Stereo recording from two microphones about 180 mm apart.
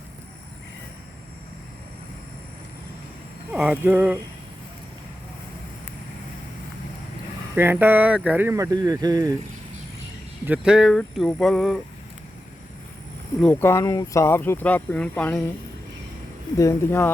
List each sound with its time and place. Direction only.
3.5 s speech: 5° right (ahead or behind)
7.5 s speech: 10° right (ahead or behind)
10.4 s speech: 5° right (ahead or behind)
13.4 s speech: 10° left (ahead or behind)
16.6 s speech: 15° left (ahead or behind)